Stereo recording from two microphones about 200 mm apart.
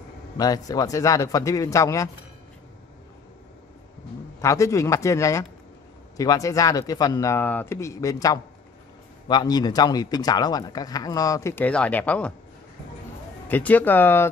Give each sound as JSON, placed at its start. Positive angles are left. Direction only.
{"t": 0.4, "sound": "speech", "side_deg": 20}
{"t": 4.4, "sound": "speech", "side_deg": 15}
{"t": 13.5, "sound": "speech", "side_deg": 10}